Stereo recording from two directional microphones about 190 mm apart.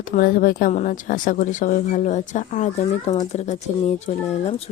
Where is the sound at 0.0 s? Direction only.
45° left (ahead or behind).